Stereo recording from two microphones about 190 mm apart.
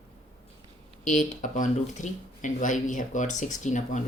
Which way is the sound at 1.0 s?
40° left (ahead or behind).